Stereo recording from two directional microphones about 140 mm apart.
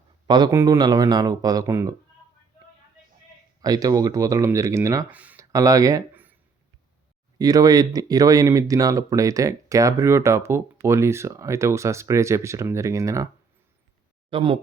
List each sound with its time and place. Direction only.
0.3 s speech: 30° right (ahead or behind)
3.6 s speech: 25° right (ahead or behind)
5.1 s speech: 10° right (ahead or behind)
5.4 s speech: 25° right (ahead or behind)
7.3 s speech: 25° right (ahead or behind)
14.3 s speech: 40° right (ahead or behind)